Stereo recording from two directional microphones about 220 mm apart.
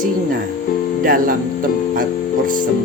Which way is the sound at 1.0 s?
40° right (ahead or behind).